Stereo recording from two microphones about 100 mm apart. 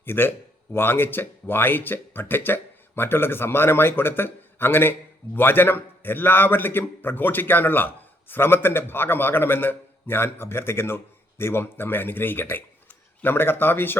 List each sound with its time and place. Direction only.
0.0 s speech: 20° left (ahead or behind)